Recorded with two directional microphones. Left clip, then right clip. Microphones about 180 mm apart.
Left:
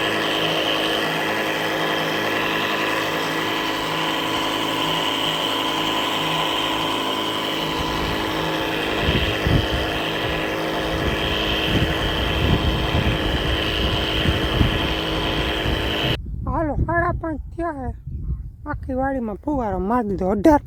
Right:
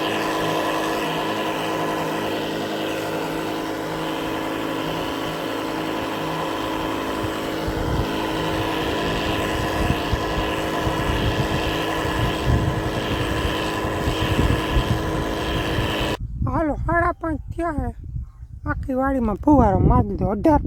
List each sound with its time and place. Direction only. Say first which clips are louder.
0.4 s vehicle: left 2 dB; 50° right (ahead or behind)
16.6 s a sound: right 1 dB; 5° right (ahead or behind)
19.5 s speech: right 8 dB; 50° right (ahead or behind)
19.9 s speech: left 1 dB; 5° left (ahead or behind)